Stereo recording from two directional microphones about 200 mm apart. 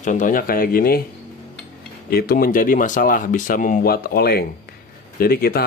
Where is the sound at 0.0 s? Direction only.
40° left (ahead or behind).